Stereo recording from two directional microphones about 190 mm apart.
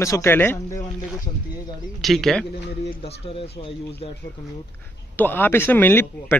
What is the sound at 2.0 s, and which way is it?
Speech, centre (ahead or behind).